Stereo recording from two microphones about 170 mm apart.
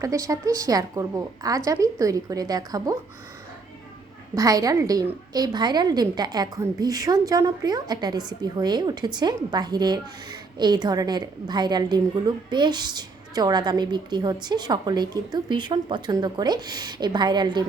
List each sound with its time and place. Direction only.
0.0 s a woman's voice: 20° right (ahead or behind)
4.4 s a woman's voice: 20° right (ahead or behind)